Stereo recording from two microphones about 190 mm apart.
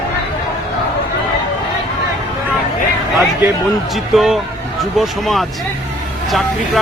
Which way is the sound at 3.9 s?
Centre (ahead or behind).